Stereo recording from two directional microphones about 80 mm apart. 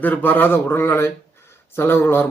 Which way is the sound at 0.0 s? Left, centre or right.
Left.